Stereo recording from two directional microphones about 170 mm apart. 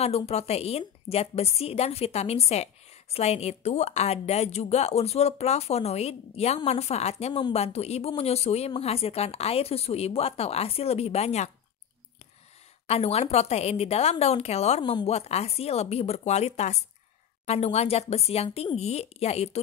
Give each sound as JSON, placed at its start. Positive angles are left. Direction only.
{"t": 0.0, "sound": "a woman's voice", "side_deg": 35}
{"t": 12.8, "sound": "a woman's voice", "side_deg": 40}
{"t": 14.8, "sound": "a woman's voice", "side_deg": 25}
{"t": 15.0, "sound": "a woman's voice", "side_deg": 40}